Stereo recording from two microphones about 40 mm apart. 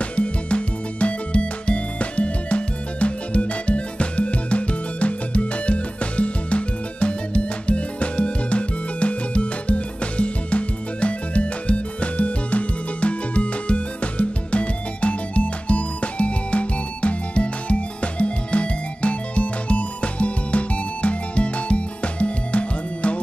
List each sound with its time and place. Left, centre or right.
0.0 s music: left